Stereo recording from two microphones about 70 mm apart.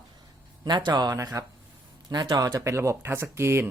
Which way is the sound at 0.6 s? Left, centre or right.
Right.